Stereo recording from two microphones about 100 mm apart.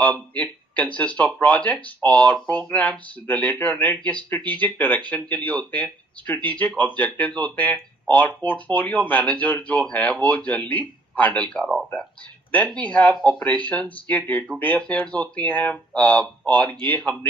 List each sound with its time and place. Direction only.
0.0 s speech: 15° left (ahead or behind)